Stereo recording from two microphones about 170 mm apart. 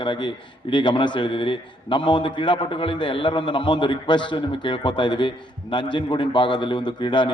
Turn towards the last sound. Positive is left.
turn(degrees=30)  # may be behind; listen again after turning